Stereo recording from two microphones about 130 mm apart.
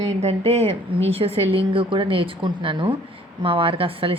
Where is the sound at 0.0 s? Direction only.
55° right (ahead or behind).